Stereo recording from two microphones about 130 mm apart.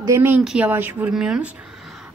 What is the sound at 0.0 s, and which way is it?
Speech, 20° right (ahead or behind).